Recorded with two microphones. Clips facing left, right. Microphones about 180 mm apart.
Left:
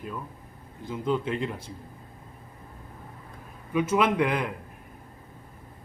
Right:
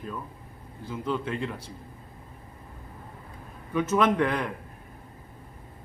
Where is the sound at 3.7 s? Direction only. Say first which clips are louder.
Even; 10° left (ahead or behind).